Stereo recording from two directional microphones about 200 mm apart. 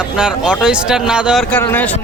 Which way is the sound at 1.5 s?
10° left (ahead or behind).